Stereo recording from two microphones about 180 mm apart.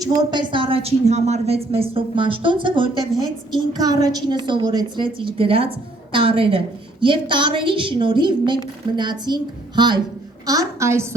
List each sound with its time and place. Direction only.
0.0 s a woman's voice: 20° right (ahead or behind)